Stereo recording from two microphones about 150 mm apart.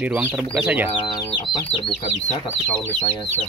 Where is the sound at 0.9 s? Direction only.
30° left (ahead or behind).